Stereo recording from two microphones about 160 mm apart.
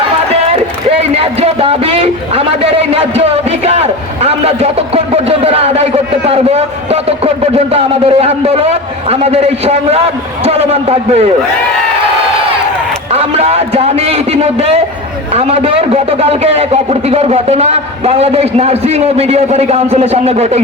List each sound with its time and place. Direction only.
0.5 s speech: 35° right (ahead or behind)
13.1 s speech: 40° right (ahead or behind)